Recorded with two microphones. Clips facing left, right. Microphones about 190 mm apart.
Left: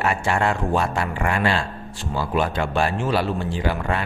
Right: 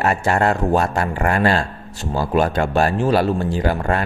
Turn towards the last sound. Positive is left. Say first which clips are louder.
# right 4 dB
turn(degrees=-45)  # may be behind; listen again after turning